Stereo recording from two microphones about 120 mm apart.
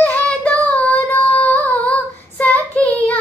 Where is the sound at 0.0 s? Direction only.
10° left (ahead or behind).